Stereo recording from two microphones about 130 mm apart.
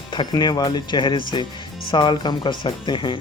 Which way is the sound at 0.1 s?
35° left (ahead or behind).